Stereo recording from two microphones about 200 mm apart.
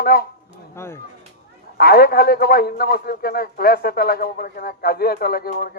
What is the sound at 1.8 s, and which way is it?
A man's voice, 50° left (ahead or behind).